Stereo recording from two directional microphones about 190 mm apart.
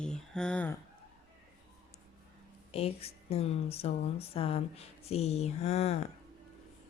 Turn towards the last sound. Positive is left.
turn(degrees=35)  # may be behind; listen again after turning